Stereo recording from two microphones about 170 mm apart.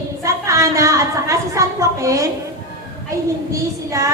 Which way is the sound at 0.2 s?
20° right (ahead or behind).